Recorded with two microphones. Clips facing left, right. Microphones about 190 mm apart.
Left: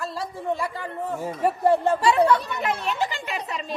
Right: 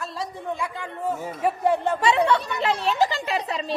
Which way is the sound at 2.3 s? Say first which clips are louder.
Even; 30° right (ahead or behind).